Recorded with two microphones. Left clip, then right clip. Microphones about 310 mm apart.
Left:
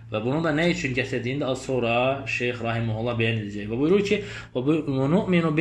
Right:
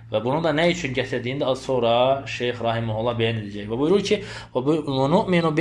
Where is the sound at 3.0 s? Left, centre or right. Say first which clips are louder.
Right 1 dB; centre.